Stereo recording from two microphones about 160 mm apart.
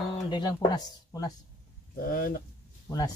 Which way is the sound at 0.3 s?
30° left (ahead or behind).